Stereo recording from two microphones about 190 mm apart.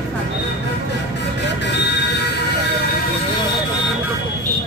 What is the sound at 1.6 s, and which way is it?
Train, 65° left (ahead or behind).